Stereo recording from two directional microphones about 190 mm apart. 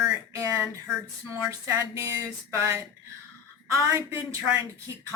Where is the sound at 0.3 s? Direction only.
15° right (ahead or behind).